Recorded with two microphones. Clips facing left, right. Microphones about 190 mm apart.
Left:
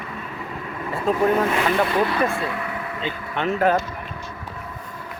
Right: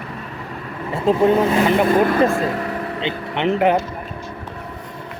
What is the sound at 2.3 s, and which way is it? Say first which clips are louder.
Vehicle: right 6 dB; 40° right (ahead or behind).